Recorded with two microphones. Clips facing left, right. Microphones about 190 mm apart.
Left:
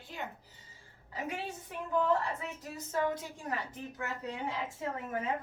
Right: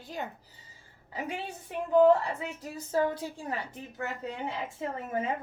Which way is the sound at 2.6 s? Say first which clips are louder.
Right 5 dB; 35° right (ahead or behind).